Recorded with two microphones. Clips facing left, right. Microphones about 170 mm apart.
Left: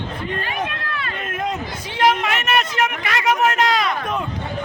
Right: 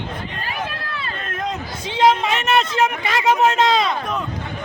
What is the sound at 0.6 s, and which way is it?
Run, 30° right (ahead or behind).